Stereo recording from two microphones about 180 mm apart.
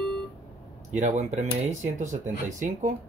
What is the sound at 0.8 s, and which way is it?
Speech, 40° right (ahead or behind).